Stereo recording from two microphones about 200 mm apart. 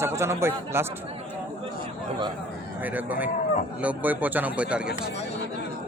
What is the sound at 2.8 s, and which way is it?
Speech, 10° right (ahead or behind).